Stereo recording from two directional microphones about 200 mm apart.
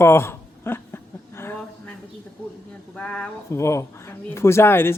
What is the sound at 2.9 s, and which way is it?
Speech, 5° left (ahead or behind).